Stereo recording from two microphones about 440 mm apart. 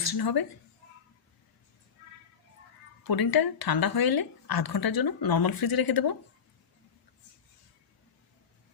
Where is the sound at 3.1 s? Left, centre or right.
Left.